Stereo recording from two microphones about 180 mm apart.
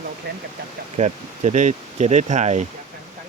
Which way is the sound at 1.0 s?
40° right (ahead or behind).